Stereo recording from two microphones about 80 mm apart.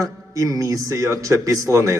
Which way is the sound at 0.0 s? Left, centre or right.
Right.